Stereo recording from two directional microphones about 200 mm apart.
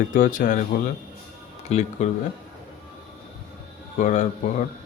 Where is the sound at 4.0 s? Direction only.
40° left (ahead or behind).